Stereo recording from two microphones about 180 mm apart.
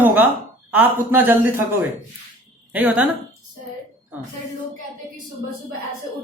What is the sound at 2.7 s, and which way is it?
Speech, 5° right (ahead or behind).